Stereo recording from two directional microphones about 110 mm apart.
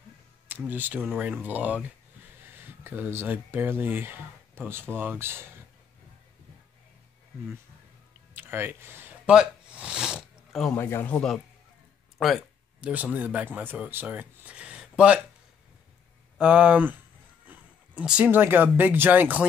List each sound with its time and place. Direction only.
0.5 s speech: 15° right (ahead or behind)
8.4 s speech: 20° right (ahead or behind)
9.3 s a sound: 10° right (ahead or behind)
10.8 s speech: 20° left (ahead or behind)
11.1 s a man's voice: 10° left (ahead or behind)
12.8 s speech: 15° right (ahead or behind)
16.3 s speech: 10° right (ahead or behind)